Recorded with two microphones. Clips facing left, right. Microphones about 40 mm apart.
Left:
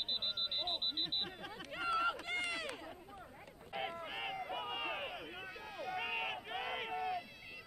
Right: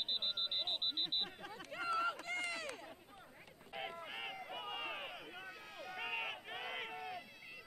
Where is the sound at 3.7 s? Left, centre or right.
Centre.